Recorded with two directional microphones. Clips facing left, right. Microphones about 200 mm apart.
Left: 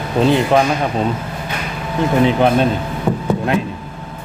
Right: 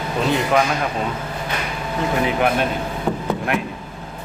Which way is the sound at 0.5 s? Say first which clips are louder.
Left 2 dB; 30° left (ahead or behind).